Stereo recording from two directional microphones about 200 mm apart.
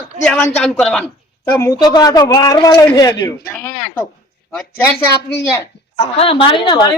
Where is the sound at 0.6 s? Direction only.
5° left (ahead or behind).